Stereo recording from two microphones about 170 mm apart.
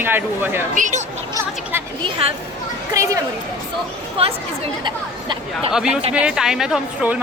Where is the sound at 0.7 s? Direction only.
45° right (ahead or behind).